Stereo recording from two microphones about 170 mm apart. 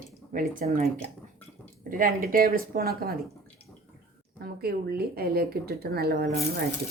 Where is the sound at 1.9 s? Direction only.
55° right (ahead or behind).